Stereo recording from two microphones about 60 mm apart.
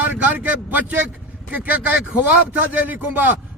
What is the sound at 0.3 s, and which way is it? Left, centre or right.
A man's voice, right.